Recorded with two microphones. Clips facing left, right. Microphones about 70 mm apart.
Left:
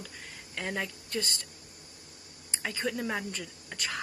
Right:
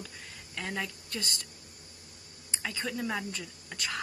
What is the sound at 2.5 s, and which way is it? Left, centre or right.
Speech, left.